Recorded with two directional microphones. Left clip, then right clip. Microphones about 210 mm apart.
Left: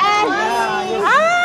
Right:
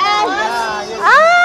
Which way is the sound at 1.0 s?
25° right (ahead or behind).